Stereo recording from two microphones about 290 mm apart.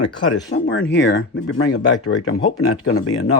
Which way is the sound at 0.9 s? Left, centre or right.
Left.